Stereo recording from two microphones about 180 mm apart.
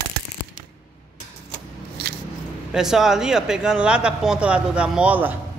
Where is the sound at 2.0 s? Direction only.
65° right (ahead or behind).